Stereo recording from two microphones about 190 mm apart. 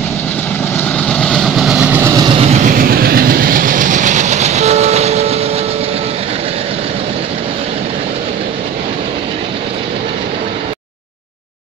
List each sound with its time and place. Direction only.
0.9 s vehicle: 5° left (ahead or behind); by 2.2 s 10° right (ahead or behind)
2.5 s train: 45° right (ahead or behind)